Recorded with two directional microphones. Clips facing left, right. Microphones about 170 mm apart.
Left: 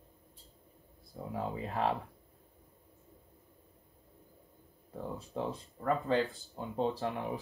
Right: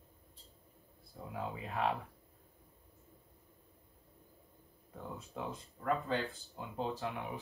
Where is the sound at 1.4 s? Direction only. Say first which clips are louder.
Left 3 dB; 35° left (ahead or behind).